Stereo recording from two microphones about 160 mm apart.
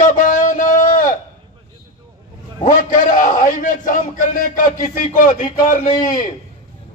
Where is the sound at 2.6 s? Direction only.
60° left (ahead or behind).